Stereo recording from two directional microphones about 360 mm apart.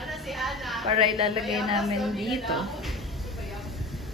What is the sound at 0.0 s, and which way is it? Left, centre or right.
A woman's voice, centre.